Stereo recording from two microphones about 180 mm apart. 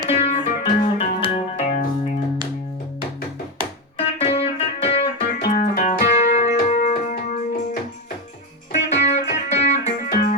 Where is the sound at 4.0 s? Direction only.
35° left (ahead or behind).